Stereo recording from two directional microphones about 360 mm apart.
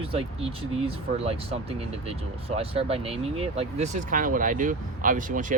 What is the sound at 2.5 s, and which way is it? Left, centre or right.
Speech, centre.